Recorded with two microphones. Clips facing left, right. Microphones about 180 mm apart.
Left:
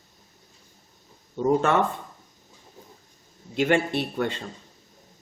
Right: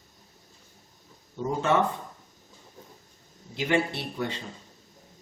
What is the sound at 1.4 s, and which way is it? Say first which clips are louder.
Speech: left 4 dB; 55° left (ahead or behind).